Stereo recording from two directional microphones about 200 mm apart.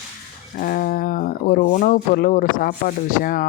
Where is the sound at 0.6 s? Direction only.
45° left (ahead or behind).